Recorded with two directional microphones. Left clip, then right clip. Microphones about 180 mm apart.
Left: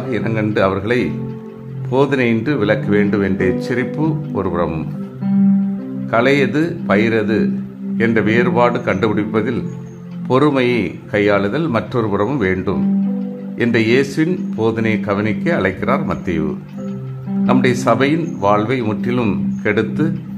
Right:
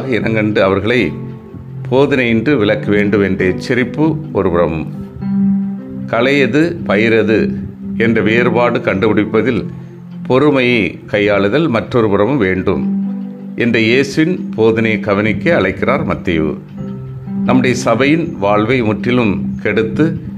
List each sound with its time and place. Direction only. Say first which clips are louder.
0.1 s speech: right 5 dB; 15° right (ahead or behind)
6.0 s speech: right 2 dB; 15° right (ahead or behind)